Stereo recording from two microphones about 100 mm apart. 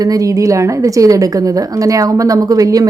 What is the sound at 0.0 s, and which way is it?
A woman's voice, 35° right (ahead or behind).